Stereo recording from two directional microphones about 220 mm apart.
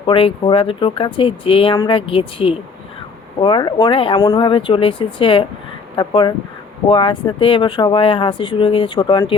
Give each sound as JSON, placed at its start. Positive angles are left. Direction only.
{"t": 0.0, "sound": "speech", "side_deg": 25}